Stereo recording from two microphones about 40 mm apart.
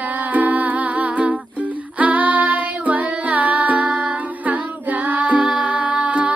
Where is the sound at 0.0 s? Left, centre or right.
Right.